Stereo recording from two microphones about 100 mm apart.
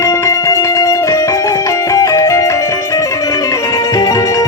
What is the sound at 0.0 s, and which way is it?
Music, 30° left (ahead or behind).